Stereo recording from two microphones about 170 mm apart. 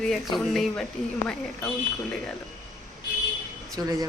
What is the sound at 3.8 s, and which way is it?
Speech, 20° right (ahead or behind).